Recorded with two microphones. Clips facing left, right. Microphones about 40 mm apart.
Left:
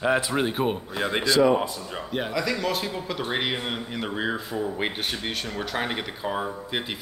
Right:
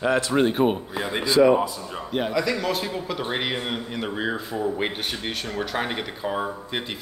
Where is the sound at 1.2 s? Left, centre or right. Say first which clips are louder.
Right 3 dB; centre.